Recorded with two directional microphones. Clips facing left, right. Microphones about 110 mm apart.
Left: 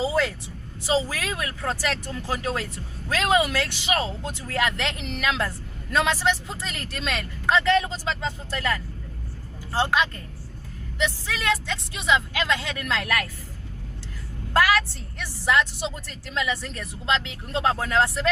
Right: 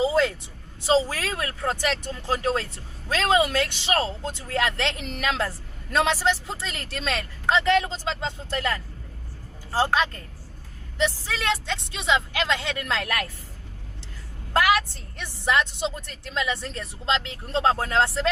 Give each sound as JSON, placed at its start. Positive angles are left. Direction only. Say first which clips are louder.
{"t": 0.0, "sound": "a sound", "louder": "right 2 dB", "side_deg": -25}
{"t": 0.9, "sound": "speech", "louder": "right 3 dB", "side_deg": -30}
{"t": 1.6, "sound": "a woman's voice", "louder": "right 2 dB", "side_deg": -20}
{"t": 4.9, "sound": "speech", "louder": "left 1 dB", "side_deg": -40}
{"t": 5.4, "sound": "a woman's voice", "louder": "even", "side_deg": -30}
{"t": 14.5, "sound": "a woman's voice", "louder": "even", "side_deg": -20}